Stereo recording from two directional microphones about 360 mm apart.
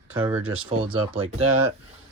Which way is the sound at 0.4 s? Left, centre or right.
Right.